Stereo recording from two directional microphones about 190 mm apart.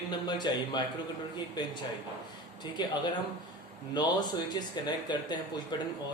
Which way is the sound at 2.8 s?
25° left (ahead or behind).